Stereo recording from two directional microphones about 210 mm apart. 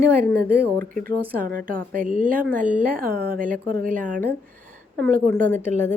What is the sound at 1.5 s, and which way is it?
Speech, 40° right (ahead or behind).